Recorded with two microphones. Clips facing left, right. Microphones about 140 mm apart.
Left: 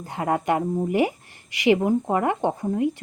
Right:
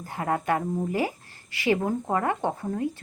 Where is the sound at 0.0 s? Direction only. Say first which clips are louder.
Left 3 dB; 20° left (ahead or behind).